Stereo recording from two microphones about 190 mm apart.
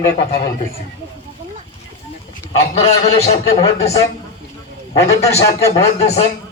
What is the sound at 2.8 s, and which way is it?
A man's voice, 35° left (ahead or behind).